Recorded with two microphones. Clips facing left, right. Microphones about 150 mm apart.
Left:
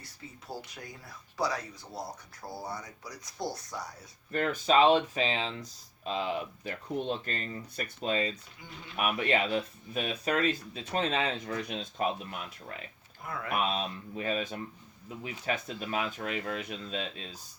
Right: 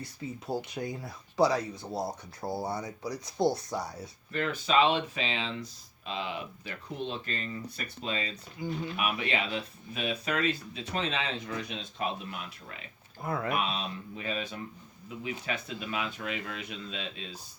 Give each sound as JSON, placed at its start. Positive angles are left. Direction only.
{"t": 0.4, "sound": "speech", "side_deg": -25}
{"t": 4.3, "sound": "speech", "side_deg": 45}
{"t": 8.6, "sound": "speech", "side_deg": -30}
{"t": 9.0, "sound": "speech", "side_deg": 45}
{"t": 13.2, "sound": "speech", "side_deg": -35}
{"t": 13.7, "sound": "speech", "side_deg": 45}